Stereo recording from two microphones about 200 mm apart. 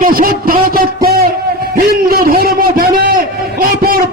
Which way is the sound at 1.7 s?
45° right (ahead or behind).